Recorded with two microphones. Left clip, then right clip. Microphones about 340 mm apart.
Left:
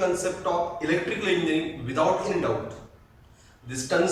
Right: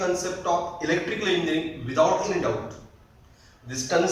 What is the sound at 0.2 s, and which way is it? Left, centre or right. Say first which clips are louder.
A man's voice: even; centre.